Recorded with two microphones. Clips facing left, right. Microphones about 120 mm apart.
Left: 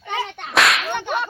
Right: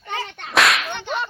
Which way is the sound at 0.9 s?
55° left (ahead or behind).